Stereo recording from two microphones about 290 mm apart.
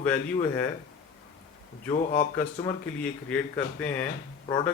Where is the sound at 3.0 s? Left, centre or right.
Centre.